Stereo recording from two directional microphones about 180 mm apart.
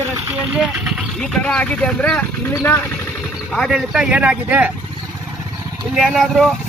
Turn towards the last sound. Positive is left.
turn(degrees=0)  # may be behind; listen again after turning